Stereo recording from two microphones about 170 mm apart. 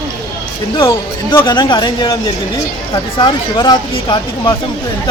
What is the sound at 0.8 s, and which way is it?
Speech, 30° left (ahead or behind).